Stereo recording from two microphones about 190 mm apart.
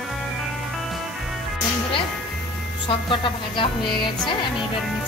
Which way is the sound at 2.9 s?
25° left (ahead or behind).